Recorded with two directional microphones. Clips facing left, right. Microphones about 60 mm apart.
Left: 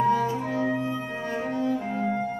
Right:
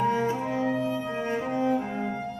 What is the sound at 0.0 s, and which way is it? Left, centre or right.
Music, right.